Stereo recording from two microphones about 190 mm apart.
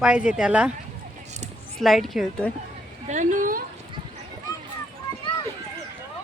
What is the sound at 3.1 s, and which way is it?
Speech, 40° right (ahead or behind).